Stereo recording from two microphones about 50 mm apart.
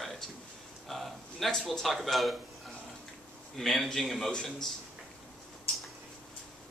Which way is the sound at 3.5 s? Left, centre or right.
Centre.